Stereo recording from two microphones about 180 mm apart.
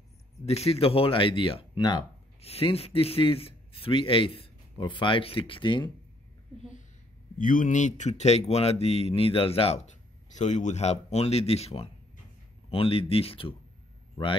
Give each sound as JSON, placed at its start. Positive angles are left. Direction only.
{"t": 0.5, "sound": "speech", "side_deg": 35}
{"t": 7.3, "sound": "speech", "side_deg": 50}